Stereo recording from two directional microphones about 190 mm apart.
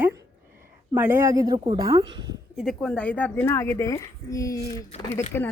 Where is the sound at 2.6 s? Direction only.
5° left (ahead or behind).